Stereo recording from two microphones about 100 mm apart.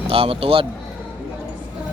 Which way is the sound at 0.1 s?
70° right (ahead or behind).